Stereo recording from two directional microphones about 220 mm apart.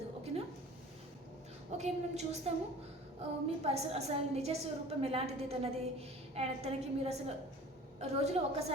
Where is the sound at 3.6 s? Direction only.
30° right (ahead or behind).